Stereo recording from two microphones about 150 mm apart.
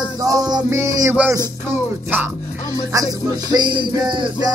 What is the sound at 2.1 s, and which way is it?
Speech, 10° right (ahead or behind).